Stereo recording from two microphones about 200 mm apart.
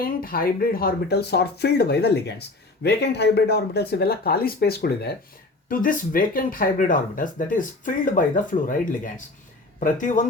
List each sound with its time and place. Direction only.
0.0 s speech: 45° left (ahead or behind)